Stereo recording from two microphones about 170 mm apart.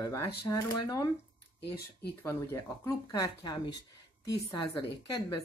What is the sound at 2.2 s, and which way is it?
Speech, 15° left (ahead or behind).